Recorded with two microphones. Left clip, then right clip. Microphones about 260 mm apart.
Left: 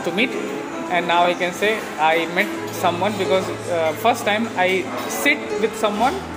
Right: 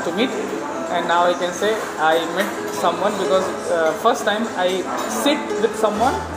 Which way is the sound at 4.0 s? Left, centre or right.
Left.